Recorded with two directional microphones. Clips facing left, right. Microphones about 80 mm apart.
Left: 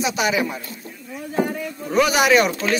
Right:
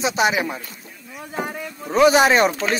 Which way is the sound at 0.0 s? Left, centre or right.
Right.